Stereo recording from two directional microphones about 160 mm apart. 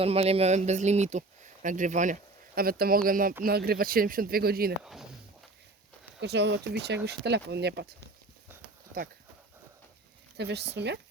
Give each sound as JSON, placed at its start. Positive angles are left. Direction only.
{"t": 0.0, "sound": "speech", "side_deg": -40}
{"t": 2.6, "sound": "speech", "side_deg": -70}
{"t": 3.4, "sound": "speech", "side_deg": -70}
{"t": 4.8, "sound": "speech", "side_deg": 0}
{"t": 6.1, "sound": "speech", "side_deg": -90}
{"t": 10.3, "sound": "speech", "side_deg": -90}